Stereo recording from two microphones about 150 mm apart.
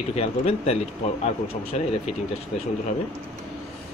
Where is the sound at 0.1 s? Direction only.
45° left (ahead or behind).